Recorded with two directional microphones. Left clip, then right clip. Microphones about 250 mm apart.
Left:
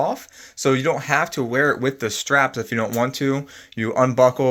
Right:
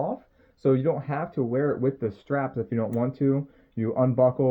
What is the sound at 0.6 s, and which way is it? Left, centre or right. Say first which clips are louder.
Speech: left 4 dB; centre.